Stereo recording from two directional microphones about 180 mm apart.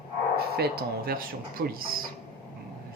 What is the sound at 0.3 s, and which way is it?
Speech, 60° right (ahead or behind).